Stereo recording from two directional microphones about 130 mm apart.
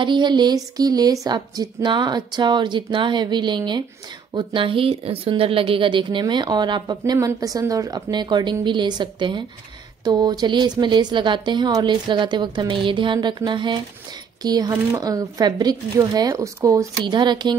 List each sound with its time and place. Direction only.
0.0 s a woman's voice: 35° right (ahead or behind)